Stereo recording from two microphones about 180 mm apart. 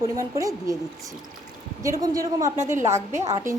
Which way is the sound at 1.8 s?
20° right (ahead or behind).